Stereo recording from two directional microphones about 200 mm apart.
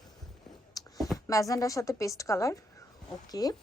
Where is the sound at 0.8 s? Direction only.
20° left (ahead or behind).